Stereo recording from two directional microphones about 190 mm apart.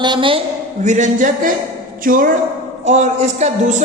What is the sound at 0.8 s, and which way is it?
A man's voice, 40° right (ahead or behind).